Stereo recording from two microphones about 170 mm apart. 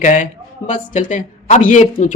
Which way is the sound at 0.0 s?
50° left (ahead or behind).